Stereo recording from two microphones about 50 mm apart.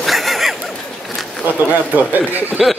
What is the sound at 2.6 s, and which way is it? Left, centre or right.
Speech, centre.